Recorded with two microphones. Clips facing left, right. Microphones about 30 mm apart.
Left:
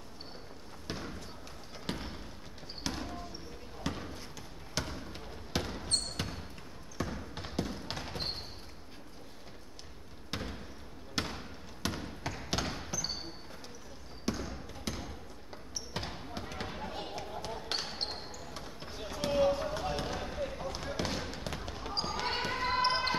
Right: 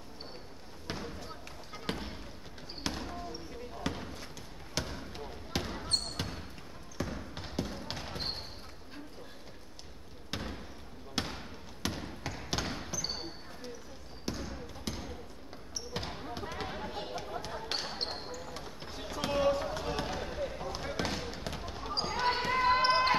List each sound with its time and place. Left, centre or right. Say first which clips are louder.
0.8 s basketball bounce: right 1 dB; centre
1.9 s basketball bounce: right 1 dB; centre
3.8 s a sound: even; centre
4.8 s basketball bounce: right 1 dB; centre
7.0 s trickle: even; centre
11.8 s basketball bounce: even; centre
14.2 s trickle: left 2 dB; centre
15.9 s basketball bounce: right 1 dB; centre
16.4 s basketball bounce: right 3 dB; centre
16.8 s a sound: right 1 dB; centre
17.6 s basketball bounce: even; centre
19.2 s fireworks: left 1 dB; centre
19.7 s basketball bounce: even; centre
22.5 s basketball bounce: right 4 dB; centre